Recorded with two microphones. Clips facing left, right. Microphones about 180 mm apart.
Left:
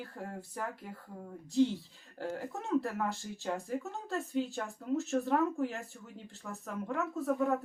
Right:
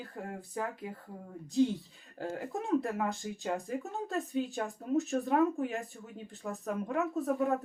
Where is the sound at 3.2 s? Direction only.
75° right (ahead or behind).